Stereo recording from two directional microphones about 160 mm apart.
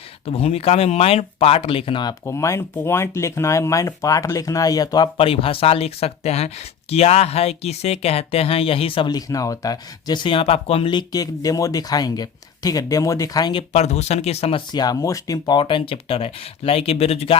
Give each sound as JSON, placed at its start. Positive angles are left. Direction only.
{"t": 0.3, "sound": "speech", "side_deg": 40}
{"t": 2.2, "sound": "speech", "side_deg": 15}
{"t": 13.7, "sound": "speech", "side_deg": 45}
{"t": 14.7, "sound": "speech", "side_deg": 25}